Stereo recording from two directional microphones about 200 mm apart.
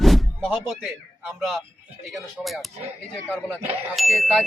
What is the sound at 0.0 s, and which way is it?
Speech, centre (ahead or behind).